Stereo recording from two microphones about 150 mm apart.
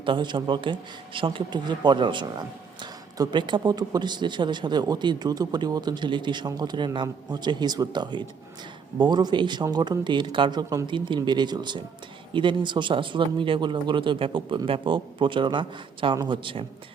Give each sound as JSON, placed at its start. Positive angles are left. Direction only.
{"t": 0.0, "sound": "a man's voice", "side_deg": -30}